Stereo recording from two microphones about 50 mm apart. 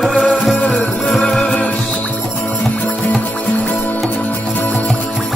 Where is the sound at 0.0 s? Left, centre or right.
Centre.